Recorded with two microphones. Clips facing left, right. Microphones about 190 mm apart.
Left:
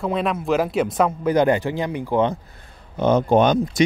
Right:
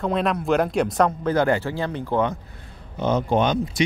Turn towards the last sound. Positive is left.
turn(degrees=50)  # may be behind; listen again after turning